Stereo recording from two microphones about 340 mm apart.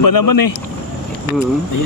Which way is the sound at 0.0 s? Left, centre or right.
Left.